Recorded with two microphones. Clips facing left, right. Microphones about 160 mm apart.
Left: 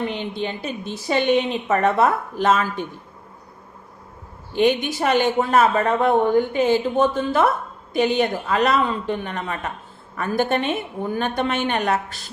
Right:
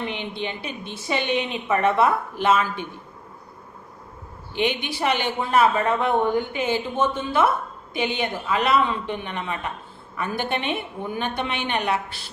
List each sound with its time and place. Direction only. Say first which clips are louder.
0.0 s speech: left 4 dB; 45° left (ahead or behind)
4.5 s speech: left 6 dB; 45° left (ahead or behind)